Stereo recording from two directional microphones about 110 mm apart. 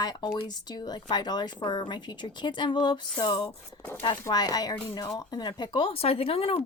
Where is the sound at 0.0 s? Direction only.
35° left (ahead or behind); by 3.6 s 55° left (ahead or behind).